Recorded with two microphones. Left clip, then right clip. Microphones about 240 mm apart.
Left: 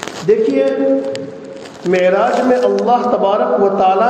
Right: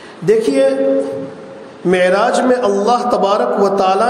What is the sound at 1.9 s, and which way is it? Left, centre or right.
A man's voice, right.